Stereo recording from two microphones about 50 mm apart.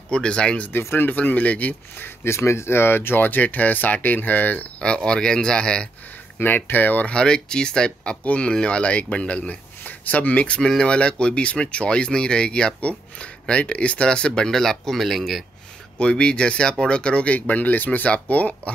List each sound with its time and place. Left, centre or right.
0.1 s speech: centre
2.0 s speech: left
2.3 s speech: left
4.7 s speech: centre
6.3 s speech: left
7.1 s speech: centre
16.0 s speech: left